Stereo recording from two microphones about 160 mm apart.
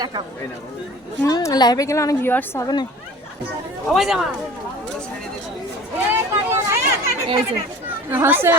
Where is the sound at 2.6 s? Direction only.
25° left (ahead or behind).